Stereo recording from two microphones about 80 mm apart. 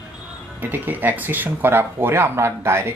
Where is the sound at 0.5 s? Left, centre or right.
Right.